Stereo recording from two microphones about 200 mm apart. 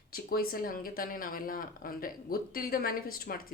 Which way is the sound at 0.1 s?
50° left (ahead or behind).